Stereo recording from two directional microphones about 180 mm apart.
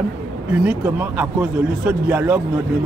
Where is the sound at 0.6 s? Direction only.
10° right (ahead or behind).